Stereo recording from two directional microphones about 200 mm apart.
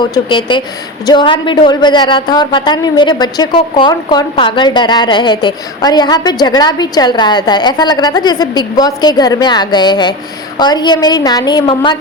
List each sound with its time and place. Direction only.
0.0 s a woman's voice: 20° left (ahead or behind)